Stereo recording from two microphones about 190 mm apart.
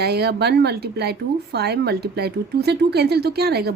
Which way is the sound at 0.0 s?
55° right (ahead or behind).